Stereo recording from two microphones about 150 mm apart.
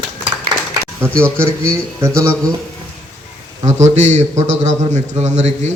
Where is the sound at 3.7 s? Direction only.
50° right (ahead or behind).